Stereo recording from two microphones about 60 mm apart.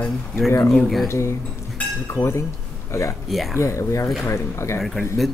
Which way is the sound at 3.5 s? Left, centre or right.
Left.